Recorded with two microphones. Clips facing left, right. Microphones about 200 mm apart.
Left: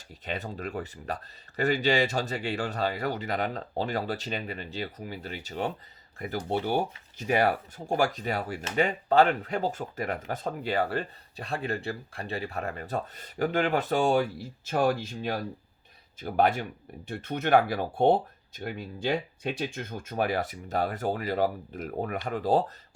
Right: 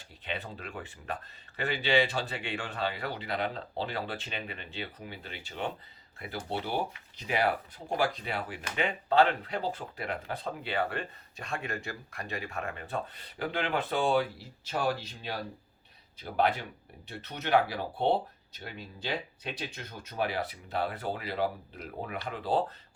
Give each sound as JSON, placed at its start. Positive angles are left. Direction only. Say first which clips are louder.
{"t": 0.3, "sound": "speech", "louder": "left 5 dB", "side_deg": 40}